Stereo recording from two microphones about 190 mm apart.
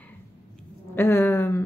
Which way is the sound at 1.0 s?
10° left (ahead or behind).